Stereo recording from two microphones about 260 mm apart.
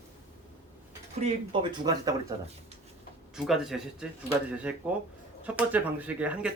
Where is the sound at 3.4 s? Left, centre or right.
Centre.